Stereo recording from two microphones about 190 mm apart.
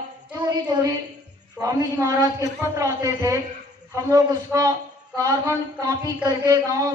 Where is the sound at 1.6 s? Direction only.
15° right (ahead or behind).